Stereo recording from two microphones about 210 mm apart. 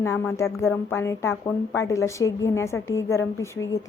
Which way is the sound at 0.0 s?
15° left (ahead or behind).